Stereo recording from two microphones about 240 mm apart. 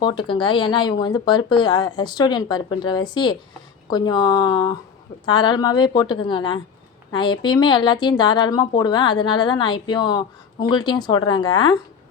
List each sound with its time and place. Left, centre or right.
0.0 s a woman's voice: centre